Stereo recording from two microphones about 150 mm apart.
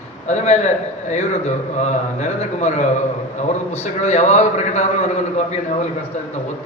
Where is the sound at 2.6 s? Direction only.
50° left (ahead or behind).